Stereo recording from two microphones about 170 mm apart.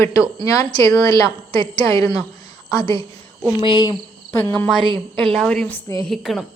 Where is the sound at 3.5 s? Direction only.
30° left (ahead or behind).